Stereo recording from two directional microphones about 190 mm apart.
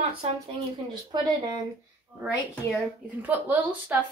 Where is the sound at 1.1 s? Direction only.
20° right (ahead or behind).